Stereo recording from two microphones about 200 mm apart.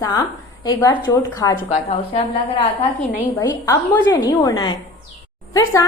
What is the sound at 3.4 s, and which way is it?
A woman's voice, 15° left (ahead or behind).